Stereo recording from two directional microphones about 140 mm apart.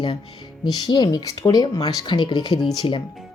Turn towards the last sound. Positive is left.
turn(degrees=35)  # may be behind; listen again after turning